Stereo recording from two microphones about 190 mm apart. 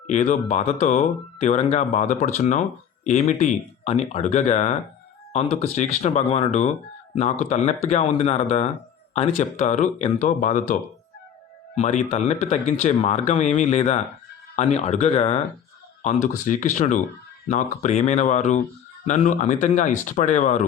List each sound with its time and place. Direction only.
0.1 s speech: 40° left (ahead or behind)